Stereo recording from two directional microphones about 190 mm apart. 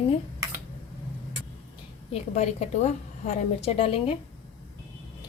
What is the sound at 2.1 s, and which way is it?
A woman's voice, 35° left (ahead or behind).